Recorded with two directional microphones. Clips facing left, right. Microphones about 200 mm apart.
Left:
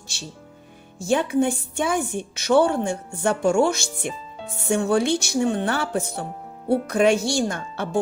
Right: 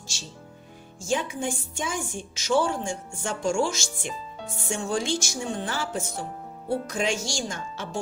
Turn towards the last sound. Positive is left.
turn(degrees=60)  # may be behind; listen again after turning